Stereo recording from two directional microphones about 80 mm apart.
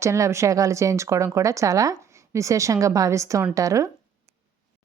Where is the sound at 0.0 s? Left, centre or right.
Right.